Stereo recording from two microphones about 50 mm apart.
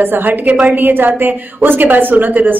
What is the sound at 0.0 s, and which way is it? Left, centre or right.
A woman's voice, right.